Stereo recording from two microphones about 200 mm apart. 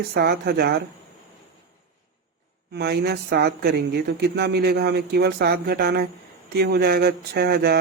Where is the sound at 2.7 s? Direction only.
55° right (ahead or behind).